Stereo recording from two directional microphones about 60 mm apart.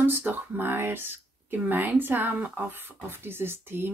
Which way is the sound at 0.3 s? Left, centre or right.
Right.